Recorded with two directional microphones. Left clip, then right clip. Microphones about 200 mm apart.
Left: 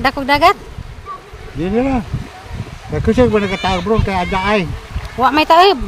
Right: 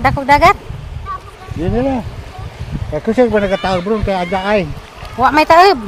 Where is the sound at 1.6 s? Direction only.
35° left (ahead or behind).